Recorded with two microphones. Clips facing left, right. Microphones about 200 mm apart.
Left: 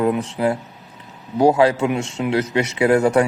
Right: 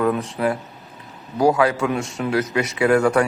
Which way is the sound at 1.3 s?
25° left (ahead or behind).